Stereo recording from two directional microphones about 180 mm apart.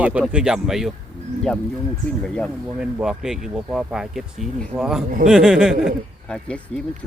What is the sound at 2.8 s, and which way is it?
Speech, 5° right (ahead or behind).